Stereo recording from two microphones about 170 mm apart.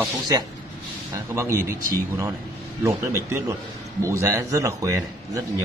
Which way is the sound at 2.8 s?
15° right (ahead or behind).